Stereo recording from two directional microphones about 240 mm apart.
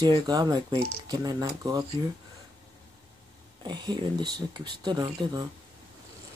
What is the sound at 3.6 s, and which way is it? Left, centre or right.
Speech, centre.